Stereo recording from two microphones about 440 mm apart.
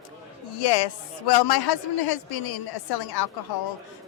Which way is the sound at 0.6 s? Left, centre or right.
Left.